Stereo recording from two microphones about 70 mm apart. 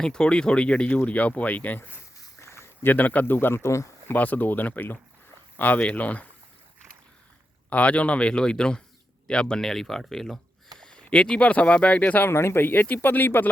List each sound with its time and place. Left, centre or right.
0.0 s speech: centre
2.4 s a sound: left
2.8 s speech: left
4.1 s speech: left
7.7 s speech: centre
12.3 s speech: left